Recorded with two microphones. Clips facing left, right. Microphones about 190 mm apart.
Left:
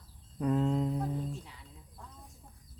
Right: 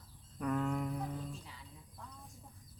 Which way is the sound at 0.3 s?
25° left (ahead or behind).